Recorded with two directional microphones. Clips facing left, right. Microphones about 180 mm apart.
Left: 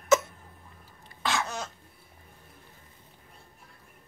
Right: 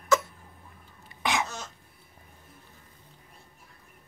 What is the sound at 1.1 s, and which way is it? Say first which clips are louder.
Cough: right 1 dB; 15° right (ahead or behind).